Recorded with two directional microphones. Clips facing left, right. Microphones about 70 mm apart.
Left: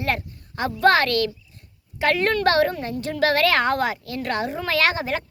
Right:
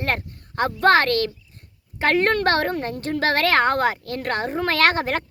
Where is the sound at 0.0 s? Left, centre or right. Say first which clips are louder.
Even; right.